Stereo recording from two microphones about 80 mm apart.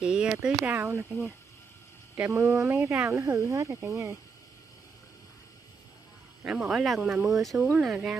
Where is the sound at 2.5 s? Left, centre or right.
Right.